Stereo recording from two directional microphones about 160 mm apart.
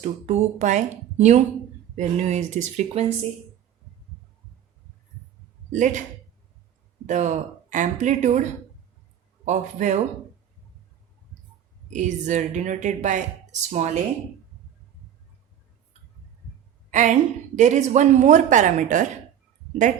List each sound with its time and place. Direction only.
0.0 s a woman's voice: 45° right (ahead or behind)
5.7 s a woman's voice: 50° right (ahead or behind)
7.1 s a woman's voice: 50° right (ahead or behind)
11.9 s a woman's voice: 50° right (ahead or behind)
16.9 s a woman's voice: 50° right (ahead or behind)